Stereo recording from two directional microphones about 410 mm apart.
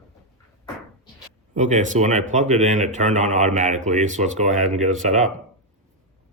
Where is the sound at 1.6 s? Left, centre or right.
Centre.